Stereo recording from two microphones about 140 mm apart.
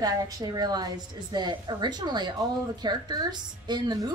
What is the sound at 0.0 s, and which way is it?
A woman's voice, 30° right (ahead or behind).